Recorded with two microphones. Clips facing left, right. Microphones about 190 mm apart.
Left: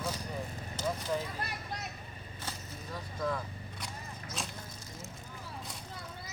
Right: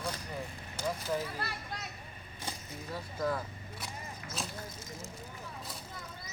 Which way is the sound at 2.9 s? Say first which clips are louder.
Right 1 dB; 5° right (ahead or behind).